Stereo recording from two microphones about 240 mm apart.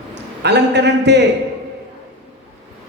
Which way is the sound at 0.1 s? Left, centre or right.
Right.